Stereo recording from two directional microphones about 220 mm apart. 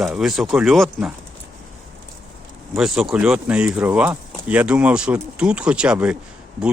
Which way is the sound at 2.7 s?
Centre (ahead or behind).